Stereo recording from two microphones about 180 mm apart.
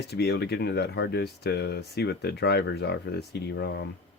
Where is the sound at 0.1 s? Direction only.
65° left (ahead or behind).